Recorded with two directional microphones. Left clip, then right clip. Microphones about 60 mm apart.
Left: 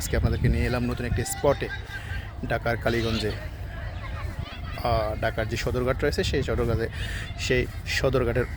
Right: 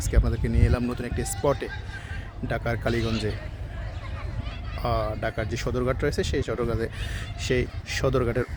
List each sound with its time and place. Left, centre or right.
0.3 s speech: right
2.5 s speech: centre
4.8 s speech: right
6.7 s speech: right